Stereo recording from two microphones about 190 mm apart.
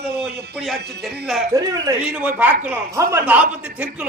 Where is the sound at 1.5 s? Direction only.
15° right (ahead or behind).